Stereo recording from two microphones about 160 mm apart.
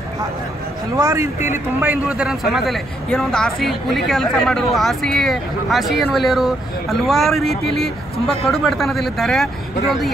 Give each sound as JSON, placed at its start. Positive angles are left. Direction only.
{"t": 0.9, "sound": "a man's voice", "side_deg": -20}